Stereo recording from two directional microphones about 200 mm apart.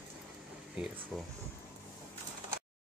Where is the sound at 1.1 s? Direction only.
Centre (ahead or behind).